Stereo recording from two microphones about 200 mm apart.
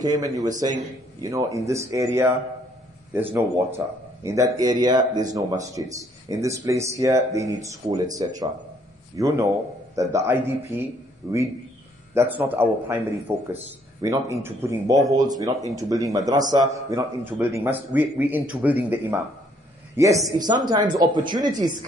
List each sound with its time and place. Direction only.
0.0 s a man's voice: 15° right (ahead or behind)
14.0 s a man's voice: 15° right (ahead or behind)